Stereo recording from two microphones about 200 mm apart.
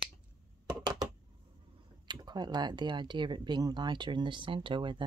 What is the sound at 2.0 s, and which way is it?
Speech, 20° right (ahead or behind).